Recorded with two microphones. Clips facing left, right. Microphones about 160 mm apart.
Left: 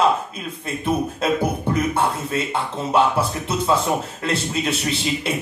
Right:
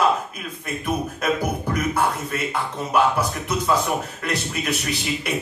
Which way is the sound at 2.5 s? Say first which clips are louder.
Left 2 dB; 25° left (ahead or behind).